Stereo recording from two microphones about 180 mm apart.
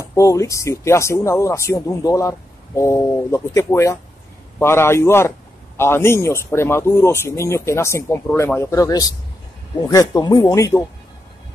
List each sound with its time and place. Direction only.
0.1 s speech: 15° left (ahead or behind)